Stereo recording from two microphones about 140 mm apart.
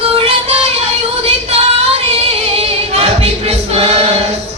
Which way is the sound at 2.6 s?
50° right (ahead or behind).